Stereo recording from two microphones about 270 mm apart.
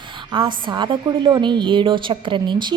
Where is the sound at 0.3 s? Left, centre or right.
Centre.